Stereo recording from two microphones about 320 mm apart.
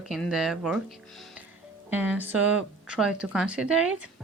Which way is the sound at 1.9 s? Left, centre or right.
Centre.